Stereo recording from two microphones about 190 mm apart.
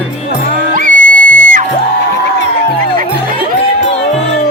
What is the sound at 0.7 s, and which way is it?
Music, 45° right (ahead or behind).